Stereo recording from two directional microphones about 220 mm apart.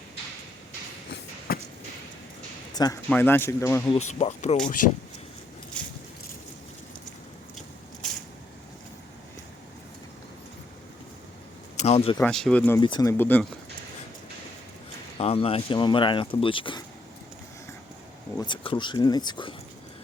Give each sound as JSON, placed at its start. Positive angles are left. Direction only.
{"t": 2.7, "sound": "speech", "side_deg": 15}
{"t": 4.1, "sound": "speech", "side_deg": 30}
{"t": 4.8, "sound": "speech", "side_deg": 90}
{"t": 5.7, "sound": "a sound", "side_deg": 5}
{"t": 8.0, "sound": "a sound", "side_deg": 0}
{"t": 11.8, "sound": "speech", "side_deg": 30}
{"t": 12.1, "sound": "speech", "side_deg": 5}
{"t": 12.8, "sound": "speech", "side_deg": 20}
{"t": 15.2, "sound": "speech", "side_deg": 25}
{"t": 18.3, "sound": "speech", "side_deg": 20}